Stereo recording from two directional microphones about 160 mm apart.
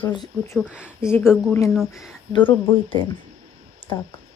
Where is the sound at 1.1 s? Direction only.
15° left (ahead or behind).